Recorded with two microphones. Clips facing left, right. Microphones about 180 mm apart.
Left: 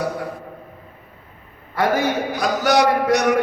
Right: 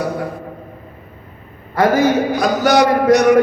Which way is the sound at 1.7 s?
45° right (ahead or behind).